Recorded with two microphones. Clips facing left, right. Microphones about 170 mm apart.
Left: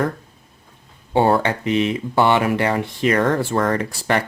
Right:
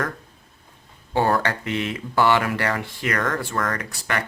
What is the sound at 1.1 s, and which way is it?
Speech, 20° left (ahead or behind).